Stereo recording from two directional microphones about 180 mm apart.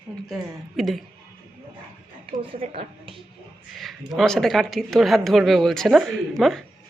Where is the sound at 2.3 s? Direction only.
30° right (ahead or behind).